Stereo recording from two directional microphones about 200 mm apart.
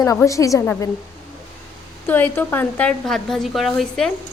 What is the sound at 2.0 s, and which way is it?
A woman's voice, 10° left (ahead or behind).